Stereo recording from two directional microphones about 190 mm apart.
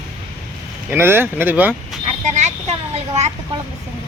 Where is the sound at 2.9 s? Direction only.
35° right (ahead or behind).